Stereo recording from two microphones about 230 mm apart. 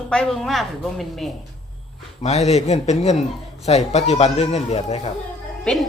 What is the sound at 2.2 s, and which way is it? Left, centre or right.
A man's voice, left.